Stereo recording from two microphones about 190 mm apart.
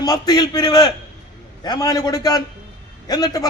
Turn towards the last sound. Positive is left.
turn(degrees=20)  # may be behind; listen again after turning